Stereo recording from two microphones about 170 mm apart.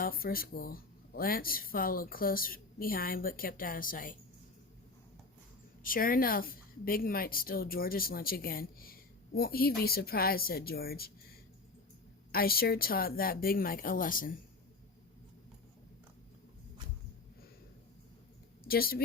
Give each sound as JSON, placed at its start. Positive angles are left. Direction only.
{"t": 0.0, "sound": "a woman's voice", "side_deg": 60}
{"t": 5.8, "sound": "a woman's voice", "side_deg": 55}
{"t": 12.3, "sound": "a woman's voice", "side_deg": 60}
{"t": 18.7, "sound": "a woman's voice", "side_deg": 60}